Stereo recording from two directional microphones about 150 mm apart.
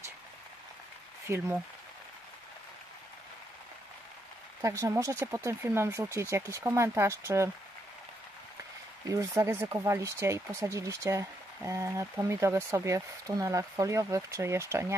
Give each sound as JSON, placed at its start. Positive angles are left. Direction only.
{"t": 1.2, "sound": "speech", "side_deg": -15}
{"t": 4.6, "sound": "speech", "side_deg": -20}
{"t": 9.0, "sound": "speech", "side_deg": -20}